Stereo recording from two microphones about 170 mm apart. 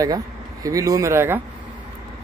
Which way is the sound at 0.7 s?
20° right (ahead or behind).